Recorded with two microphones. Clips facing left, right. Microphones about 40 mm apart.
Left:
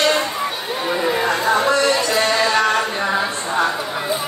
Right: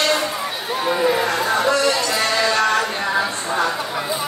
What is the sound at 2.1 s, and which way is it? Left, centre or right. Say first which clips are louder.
Music: left 2 dB; centre.